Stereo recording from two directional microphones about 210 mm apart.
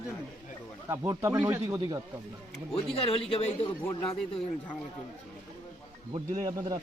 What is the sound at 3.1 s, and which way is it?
A man's voice, 25° left (ahead or behind).